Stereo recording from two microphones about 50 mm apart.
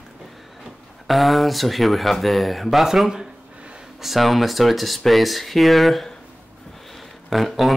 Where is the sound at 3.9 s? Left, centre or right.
Centre.